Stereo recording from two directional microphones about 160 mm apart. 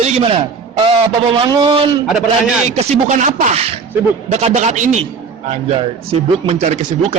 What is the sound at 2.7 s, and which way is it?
Speech, 50° right (ahead or behind).